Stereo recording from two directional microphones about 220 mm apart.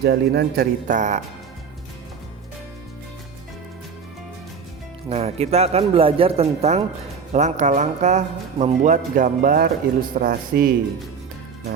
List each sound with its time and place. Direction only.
0.0 s speech: 45° right (ahead or behind)
5.0 s speech: 30° right (ahead or behind)